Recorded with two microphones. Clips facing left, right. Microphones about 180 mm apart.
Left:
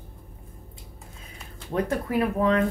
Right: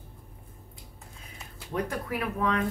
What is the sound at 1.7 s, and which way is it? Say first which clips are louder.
Speech: left 4 dB; 35° left (ahead or behind).